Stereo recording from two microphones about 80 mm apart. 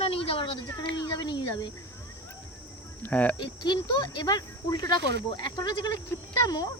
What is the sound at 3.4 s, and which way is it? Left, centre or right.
Speech, left.